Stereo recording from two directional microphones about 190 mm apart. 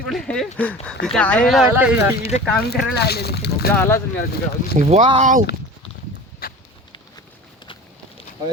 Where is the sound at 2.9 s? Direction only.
60° left (ahead or behind).